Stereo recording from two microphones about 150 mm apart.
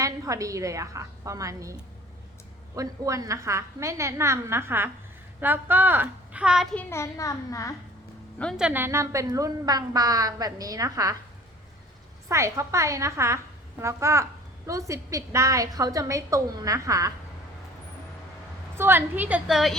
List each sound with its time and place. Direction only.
0.0 s a woman's voice: 20° right (ahead or behind)
2.7 s a woman's voice: 25° right (ahead or behind); by 6.7 s 5° right (ahead or behind)
6.7 s a child's voice: 20° left (ahead or behind)
8.5 s a woman's voice: 10° right (ahead or behind)
12.3 s a woman's voice: 20° right (ahead or behind)
18.8 s a woman's voice: 15° right (ahead or behind)